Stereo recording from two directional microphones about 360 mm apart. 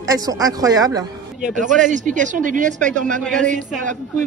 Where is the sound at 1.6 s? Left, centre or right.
Right.